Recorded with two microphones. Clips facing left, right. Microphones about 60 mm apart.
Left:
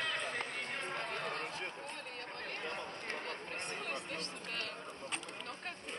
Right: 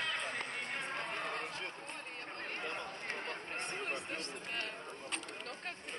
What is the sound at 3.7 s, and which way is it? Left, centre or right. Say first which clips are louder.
Speech: right 1 dB; right.